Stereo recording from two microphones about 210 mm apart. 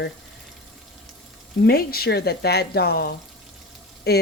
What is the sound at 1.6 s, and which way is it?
Speech, 45° left (ahead or behind).